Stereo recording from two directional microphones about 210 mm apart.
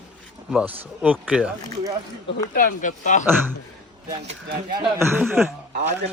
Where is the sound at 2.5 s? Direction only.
40° left (ahead or behind).